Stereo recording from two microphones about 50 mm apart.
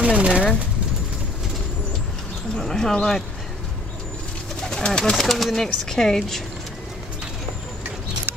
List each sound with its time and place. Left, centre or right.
0.0 s speech: right
2.5 s speech: centre
4.6 s bird: centre
5.2 s speech: centre